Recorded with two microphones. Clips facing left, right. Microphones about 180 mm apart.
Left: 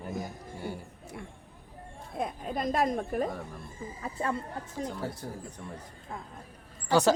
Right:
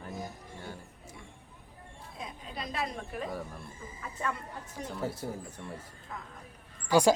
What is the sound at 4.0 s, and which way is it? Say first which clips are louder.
Speech: left 4 dB; 30° left (ahead or behind).